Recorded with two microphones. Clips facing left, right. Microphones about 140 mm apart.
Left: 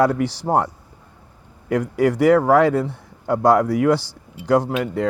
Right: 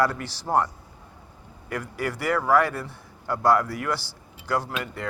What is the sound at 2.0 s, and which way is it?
Speech, 75° left (ahead or behind).